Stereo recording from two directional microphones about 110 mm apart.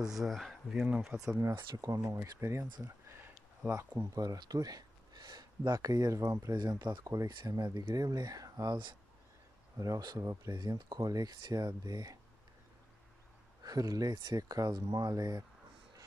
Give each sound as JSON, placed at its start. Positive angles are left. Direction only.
{"t": 0.1, "sound": "speech", "side_deg": 0}
{"t": 1.5, "sound": "speech", "side_deg": -45}
{"t": 2.0, "sound": "speech", "side_deg": -20}
{"t": 9.8, "sound": "speech", "side_deg": -35}
{"t": 13.6, "sound": "speech", "side_deg": -35}